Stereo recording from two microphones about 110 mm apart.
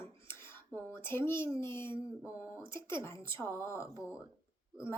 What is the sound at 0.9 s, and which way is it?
A woman's voice, 20° left (ahead or behind).